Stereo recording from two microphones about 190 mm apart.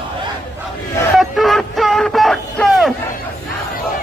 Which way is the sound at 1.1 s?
Centre (ahead or behind).